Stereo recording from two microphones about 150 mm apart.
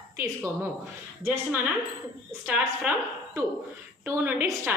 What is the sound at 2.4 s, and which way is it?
Speech, 10° right (ahead or behind).